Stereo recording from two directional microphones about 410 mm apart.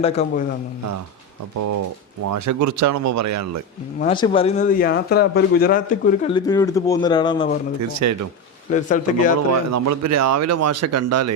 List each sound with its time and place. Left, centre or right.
0.0 s a man's voice: centre
2.3 s speech: right
4.0 s a man's voice: centre
7.8 s speech: right
8.7 s a man's voice: centre
9.7 s speech: right